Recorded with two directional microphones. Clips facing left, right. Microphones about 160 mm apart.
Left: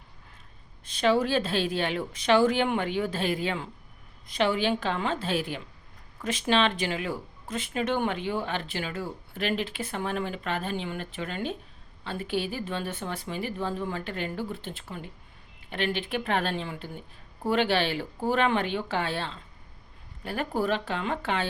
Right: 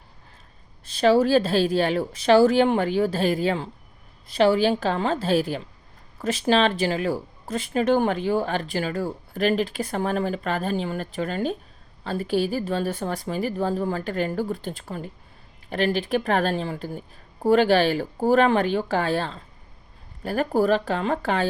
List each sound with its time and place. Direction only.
0.9 s speech: 35° right (ahead or behind)